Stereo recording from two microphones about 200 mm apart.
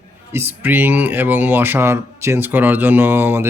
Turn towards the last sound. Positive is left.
turn(degrees=-10)  # may be behind; listen again after turning